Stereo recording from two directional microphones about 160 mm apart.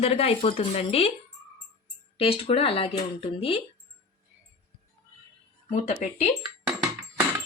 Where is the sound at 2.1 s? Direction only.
35° left (ahead or behind).